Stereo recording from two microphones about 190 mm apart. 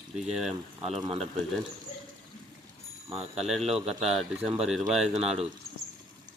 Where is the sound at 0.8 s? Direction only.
35° right (ahead or behind).